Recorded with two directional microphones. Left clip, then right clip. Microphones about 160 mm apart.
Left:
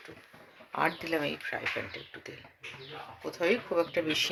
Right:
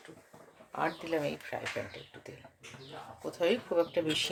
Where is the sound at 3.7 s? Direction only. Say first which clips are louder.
Even; centre (ahead or behind).